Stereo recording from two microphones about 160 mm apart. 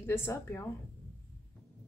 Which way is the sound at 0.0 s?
15° left (ahead or behind).